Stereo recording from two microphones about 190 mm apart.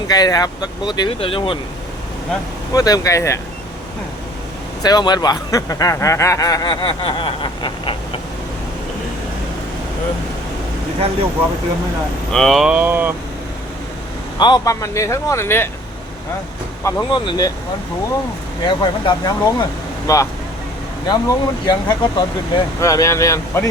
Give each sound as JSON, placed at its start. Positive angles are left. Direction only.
{"t": 0.1, "sound": "speech", "side_deg": 20}
{"t": 2.7, "sound": "speech", "side_deg": 20}
{"t": 4.8, "sound": "speech", "side_deg": 20}
{"t": 12.3, "sound": "speech", "side_deg": 0}
{"t": 14.3, "sound": "speech", "side_deg": 20}
{"t": 16.8, "sound": "speech", "side_deg": 20}
{"t": 18.6, "sound": "speech", "side_deg": 25}